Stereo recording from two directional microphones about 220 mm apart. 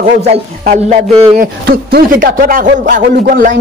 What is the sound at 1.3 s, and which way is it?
A man's voice, 40° right (ahead or behind).